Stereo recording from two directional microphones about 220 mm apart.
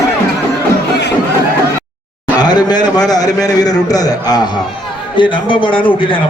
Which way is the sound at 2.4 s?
20° left (ahead or behind).